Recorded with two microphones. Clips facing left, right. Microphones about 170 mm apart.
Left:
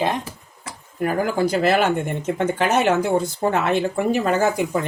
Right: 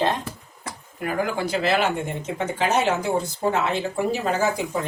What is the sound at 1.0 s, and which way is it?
Speech, 45° left (ahead or behind).